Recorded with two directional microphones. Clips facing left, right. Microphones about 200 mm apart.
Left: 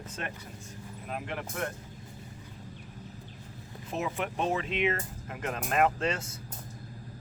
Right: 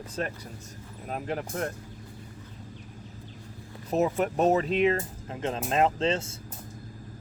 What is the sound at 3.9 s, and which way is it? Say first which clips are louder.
Speech: right 8 dB; 40° right (ahead or behind).